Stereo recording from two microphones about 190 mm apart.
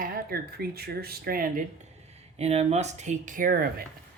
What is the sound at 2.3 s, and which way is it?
Speech, 35° right (ahead or behind).